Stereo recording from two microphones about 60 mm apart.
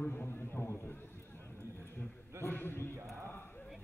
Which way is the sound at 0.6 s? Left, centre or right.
Left.